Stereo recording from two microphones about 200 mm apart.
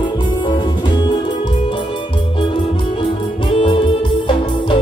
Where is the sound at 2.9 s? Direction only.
25° left (ahead or behind).